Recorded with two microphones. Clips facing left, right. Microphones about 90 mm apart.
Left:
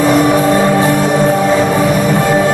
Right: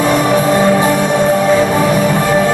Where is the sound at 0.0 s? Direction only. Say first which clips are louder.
Left 2 dB; 5° left (ahead or behind).